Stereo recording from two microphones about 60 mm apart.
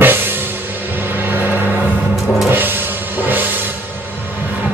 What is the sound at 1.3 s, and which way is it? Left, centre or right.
Music, right.